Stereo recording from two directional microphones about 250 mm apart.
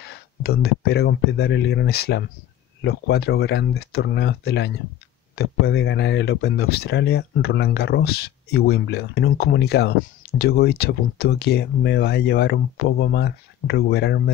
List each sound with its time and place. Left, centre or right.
0.0 s speech: left